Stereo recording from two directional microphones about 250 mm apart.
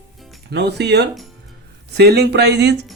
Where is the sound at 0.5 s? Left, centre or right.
Right.